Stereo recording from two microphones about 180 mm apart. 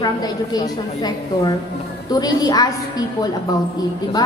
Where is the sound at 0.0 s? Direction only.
20° left (ahead or behind).